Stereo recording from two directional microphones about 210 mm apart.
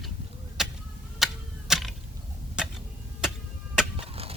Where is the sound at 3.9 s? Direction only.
25° right (ahead or behind).